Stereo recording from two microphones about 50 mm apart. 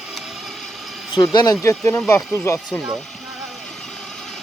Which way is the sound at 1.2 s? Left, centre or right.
Left.